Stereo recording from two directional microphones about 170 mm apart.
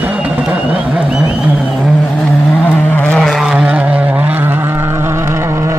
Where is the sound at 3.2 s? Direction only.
Centre (ahead or behind).